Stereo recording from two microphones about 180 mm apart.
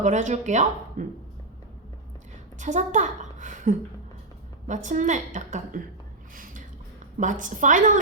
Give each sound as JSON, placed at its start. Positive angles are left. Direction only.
{"t": 0.0, "sound": "speech", "side_deg": -40}
{"t": 2.6, "sound": "a woman's voice", "side_deg": -45}
{"t": 6.3, "sound": "a sound", "side_deg": -50}
{"t": 7.2, "sound": "a woman's voice", "side_deg": -45}